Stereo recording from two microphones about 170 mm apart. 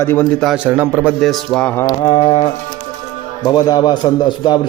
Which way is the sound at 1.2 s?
Centre (ahead or behind).